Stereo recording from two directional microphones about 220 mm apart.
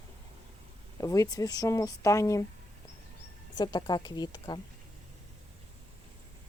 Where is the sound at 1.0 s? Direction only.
15° left (ahead or behind).